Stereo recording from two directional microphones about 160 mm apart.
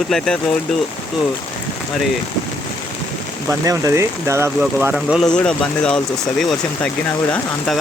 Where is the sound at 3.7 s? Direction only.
20° right (ahead or behind).